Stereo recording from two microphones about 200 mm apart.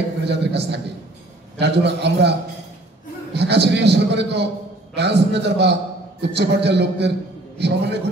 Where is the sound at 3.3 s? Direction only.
55° right (ahead or behind).